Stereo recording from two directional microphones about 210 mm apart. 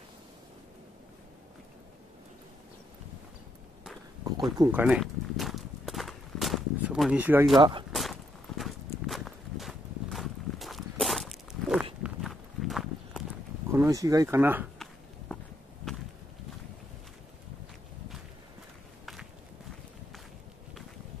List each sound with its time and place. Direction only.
4.6 s walk: 10° right (ahead or behind)
7.5 s speech: 20° right (ahead or behind)
7.9 s walk: centre (ahead or behind)
13.7 s speech: 15° right (ahead or behind)